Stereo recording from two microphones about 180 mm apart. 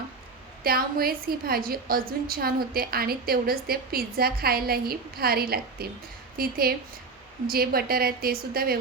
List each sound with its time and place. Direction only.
0.6 s a woman's voice: 55° right (ahead or behind)